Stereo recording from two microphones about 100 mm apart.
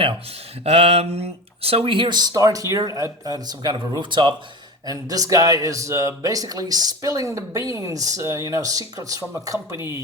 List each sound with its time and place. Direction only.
0.6 s speech: 85° right; by 4.4 s 55° right (ahead or behind)
4.9 s speech: 35° right (ahead or behind)